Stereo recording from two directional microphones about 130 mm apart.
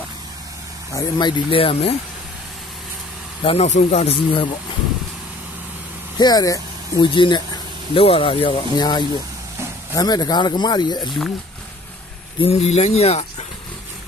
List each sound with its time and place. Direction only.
0.9 s speech: 35° left (ahead or behind)
3.4 s speech: 55° left (ahead or behind)
6.1 s speech: 30° left (ahead or behind)
11.1 s speech: centre (ahead or behind)
12.4 s speech: 50° left (ahead or behind)